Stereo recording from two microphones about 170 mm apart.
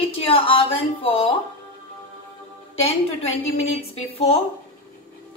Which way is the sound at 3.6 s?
35° left (ahead or behind).